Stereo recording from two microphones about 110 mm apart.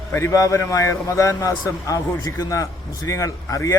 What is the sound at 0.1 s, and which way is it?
A man's voice, 25° left (ahead or behind).